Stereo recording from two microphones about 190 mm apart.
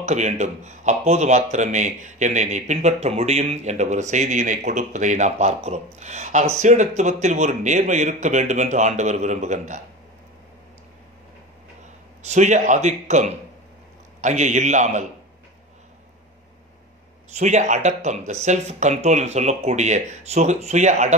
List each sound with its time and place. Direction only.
0.0 s a man's voice: 40° right (ahead or behind)
12.2 s a man's voice: 40° right (ahead or behind)
17.3 s a man's voice: 35° right (ahead or behind)